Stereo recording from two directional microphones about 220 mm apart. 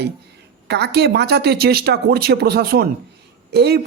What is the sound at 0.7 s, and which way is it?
A man's voice, 50° right (ahead or behind).